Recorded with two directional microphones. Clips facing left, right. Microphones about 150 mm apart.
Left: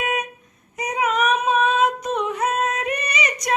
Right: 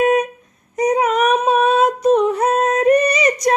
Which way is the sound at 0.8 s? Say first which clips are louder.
Right 6 dB; 35° right (ahead or behind).